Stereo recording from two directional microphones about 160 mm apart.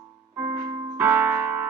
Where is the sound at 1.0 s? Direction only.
10° right (ahead or behind).